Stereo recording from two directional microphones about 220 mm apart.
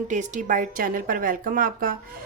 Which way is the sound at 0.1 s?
35° right (ahead or behind).